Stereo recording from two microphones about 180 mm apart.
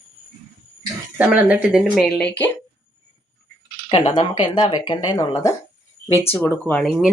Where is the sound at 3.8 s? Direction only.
35° left (ahead or behind); by 6.9 s 5° left (ahead or behind).